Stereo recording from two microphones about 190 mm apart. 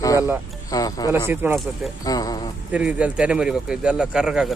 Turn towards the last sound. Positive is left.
turn(degrees=-5)  # may be behind; listen again after turning